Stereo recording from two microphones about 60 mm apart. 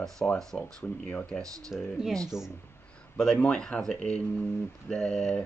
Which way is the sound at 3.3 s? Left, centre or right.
Left.